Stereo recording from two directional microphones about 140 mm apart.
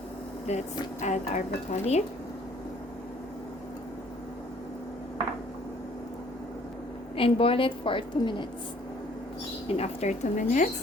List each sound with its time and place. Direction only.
0.5 s speech: 50° left (ahead or behind)
7.2 s a woman's voice: 40° left (ahead or behind)
9.6 s speech: 50° left (ahead or behind)